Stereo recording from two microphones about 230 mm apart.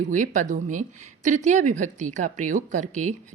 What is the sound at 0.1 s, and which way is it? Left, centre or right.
A woman's voice, right.